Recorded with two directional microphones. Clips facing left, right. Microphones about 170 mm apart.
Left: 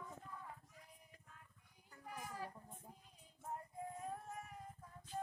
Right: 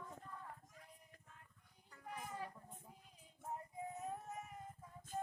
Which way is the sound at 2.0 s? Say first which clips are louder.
Right 1 dB; centre (ahead or behind).